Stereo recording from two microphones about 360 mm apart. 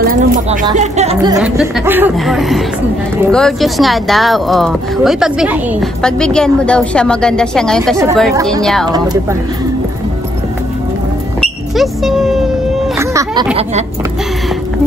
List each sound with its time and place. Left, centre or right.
0.0 s a sound: right
0.7 s speech: centre
11.7 s speech: centre